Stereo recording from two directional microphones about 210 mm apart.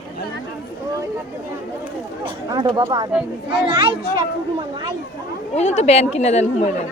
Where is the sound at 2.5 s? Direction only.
20° right (ahead or behind).